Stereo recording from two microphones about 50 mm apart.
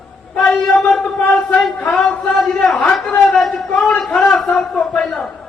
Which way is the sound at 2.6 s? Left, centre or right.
Centre.